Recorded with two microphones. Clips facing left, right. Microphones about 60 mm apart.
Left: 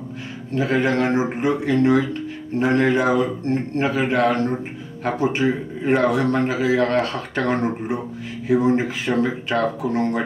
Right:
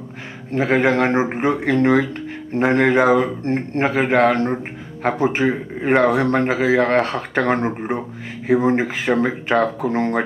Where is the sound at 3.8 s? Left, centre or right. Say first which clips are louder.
Right 3 dB; right.